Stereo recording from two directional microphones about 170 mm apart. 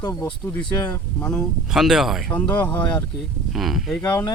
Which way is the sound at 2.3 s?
10° left (ahead or behind).